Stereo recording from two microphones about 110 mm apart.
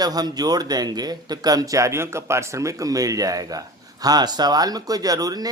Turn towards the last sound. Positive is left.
turn(degrees=-35)  # may be behind; listen again after turning